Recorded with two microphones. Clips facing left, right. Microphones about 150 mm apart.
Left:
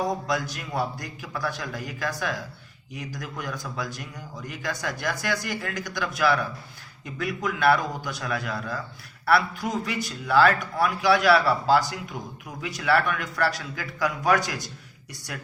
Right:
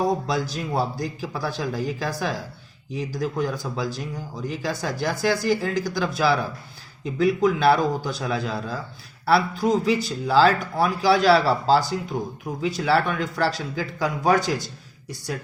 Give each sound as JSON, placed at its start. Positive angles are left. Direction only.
{"t": 0.0, "sound": "speech", "side_deg": -30}